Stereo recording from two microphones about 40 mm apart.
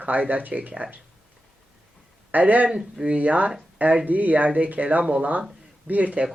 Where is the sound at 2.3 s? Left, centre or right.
Right.